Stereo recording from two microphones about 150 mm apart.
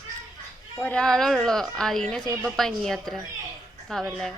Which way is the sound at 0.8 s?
10° left (ahead or behind).